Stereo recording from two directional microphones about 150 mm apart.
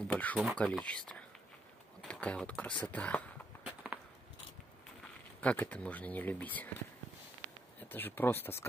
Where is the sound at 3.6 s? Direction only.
10° right (ahead or behind).